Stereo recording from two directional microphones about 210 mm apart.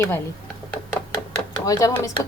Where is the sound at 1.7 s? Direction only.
15° left (ahead or behind).